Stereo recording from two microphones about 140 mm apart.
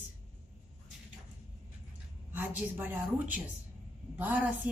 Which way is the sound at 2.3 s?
10° right (ahead or behind).